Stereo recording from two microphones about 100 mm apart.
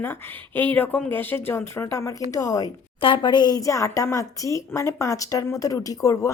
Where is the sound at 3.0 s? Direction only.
55° left (ahead or behind); by 6.3 s 35° left (ahead or behind).